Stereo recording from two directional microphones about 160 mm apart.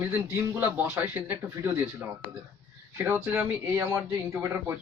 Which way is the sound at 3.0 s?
10° right (ahead or behind).